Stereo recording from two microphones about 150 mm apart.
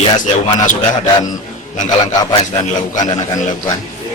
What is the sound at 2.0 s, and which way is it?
A man's voice, 30° left (ahead or behind).